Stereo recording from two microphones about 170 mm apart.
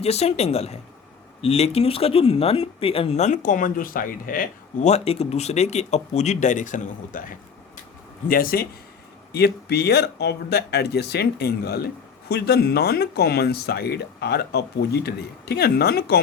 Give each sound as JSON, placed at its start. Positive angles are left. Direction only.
{"t": 0.0, "sound": "speech", "side_deg": 40}
{"t": 4.9, "sound": "speech", "side_deg": 40}
{"t": 9.3, "sound": "speech", "side_deg": 70}